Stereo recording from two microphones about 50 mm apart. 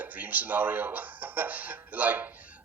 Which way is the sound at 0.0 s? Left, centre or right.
Right.